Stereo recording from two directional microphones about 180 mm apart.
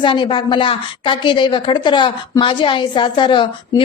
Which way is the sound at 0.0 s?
25° left (ahead or behind).